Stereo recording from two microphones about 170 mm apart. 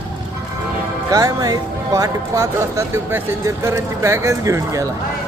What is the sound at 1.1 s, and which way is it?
Speech, 20° right (ahead or behind).